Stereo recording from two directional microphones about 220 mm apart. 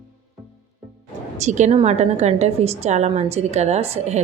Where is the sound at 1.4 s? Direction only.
30° right (ahead or behind).